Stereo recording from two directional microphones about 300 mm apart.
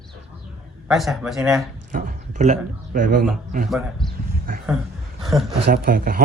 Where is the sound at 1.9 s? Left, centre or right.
Right.